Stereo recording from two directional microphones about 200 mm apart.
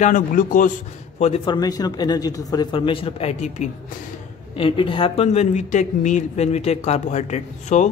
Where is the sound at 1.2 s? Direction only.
25° left (ahead or behind).